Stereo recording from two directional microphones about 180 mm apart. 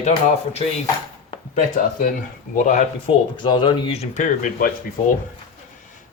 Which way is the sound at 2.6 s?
45° left (ahead or behind).